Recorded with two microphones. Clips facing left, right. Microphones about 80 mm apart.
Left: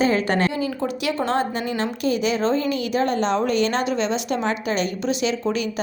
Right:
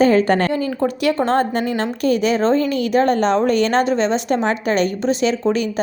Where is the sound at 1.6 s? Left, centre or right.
Right.